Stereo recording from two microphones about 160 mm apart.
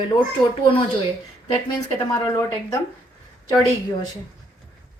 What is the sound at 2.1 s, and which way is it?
Speech, 20° left (ahead or behind).